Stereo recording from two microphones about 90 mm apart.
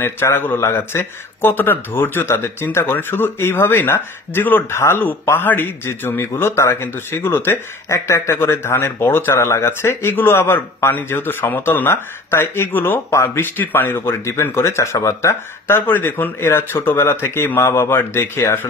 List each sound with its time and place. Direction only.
0.0 s speech: 25° left (ahead or behind)